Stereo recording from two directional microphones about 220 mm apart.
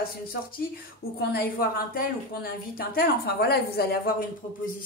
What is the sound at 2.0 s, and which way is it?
A woman's voice, 40° left (ahead or behind).